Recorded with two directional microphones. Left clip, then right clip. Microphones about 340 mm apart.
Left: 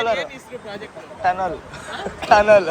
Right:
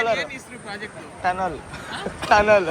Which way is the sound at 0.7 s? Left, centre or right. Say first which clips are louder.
Right 4 dB; centre.